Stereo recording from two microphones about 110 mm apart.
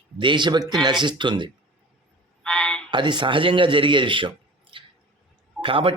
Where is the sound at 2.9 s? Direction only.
45° right (ahead or behind).